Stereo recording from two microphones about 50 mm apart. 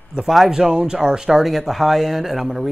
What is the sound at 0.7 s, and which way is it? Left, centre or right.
Speech, right.